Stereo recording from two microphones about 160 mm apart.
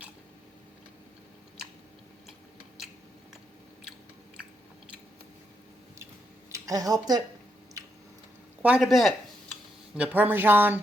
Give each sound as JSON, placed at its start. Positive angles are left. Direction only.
{"t": 6.5, "sound": "speech", "side_deg": -20}
{"t": 7.8, "sound": "squish", "side_deg": -20}
{"t": 8.6, "sound": "speech", "side_deg": -5}